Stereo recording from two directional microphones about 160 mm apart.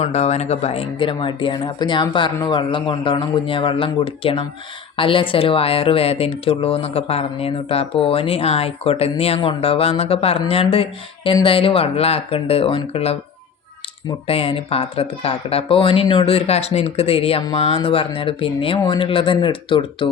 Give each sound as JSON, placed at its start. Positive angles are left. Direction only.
{"t": 0.0, "sound": "speech", "side_deg": 45}
{"t": 14.3, "sound": "speech", "side_deg": 35}